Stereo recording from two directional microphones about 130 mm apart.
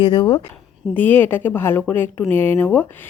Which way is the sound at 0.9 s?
15° left (ahead or behind).